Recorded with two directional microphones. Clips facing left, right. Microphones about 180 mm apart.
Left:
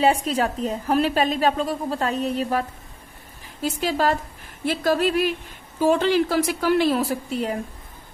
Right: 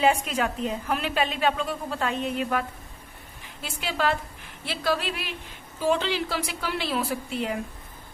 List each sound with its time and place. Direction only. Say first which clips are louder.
0.0 s a woman's voice: left 3 dB; 35° left (ahead or behind)
3.6 s a woman's voice: left 5 dB; 40° left (ahead or behind)